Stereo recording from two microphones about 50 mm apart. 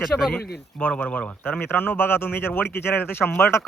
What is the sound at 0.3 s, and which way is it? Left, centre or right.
Speech, left.